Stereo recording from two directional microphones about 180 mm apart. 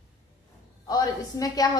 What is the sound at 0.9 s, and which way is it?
Speech, 20° left (ahead or behind).